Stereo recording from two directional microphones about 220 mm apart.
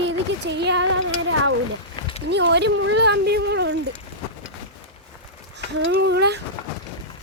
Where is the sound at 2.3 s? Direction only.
50° right (ahead or behind).